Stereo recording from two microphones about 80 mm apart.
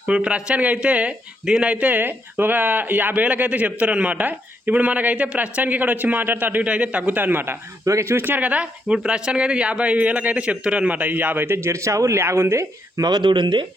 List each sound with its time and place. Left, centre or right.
0.0 s speech: centre
7.9 s speech: right
8.2 s speech: right
13.0 s speech: right